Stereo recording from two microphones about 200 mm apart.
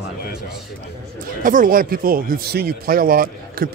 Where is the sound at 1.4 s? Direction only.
40° right (ahead or behind).